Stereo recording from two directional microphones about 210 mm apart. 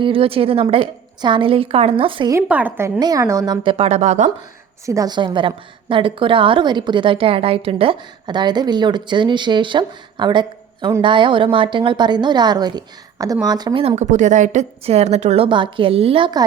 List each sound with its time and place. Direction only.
0.0 s a woman's voice: 25° right (ahead or behind)
2.5 s a woman's voice: 10° right (ahead or behind); by 4.3 s 35° right (ahead or behind)
4.9 s a woman's voice: 15° right (ahead or behind)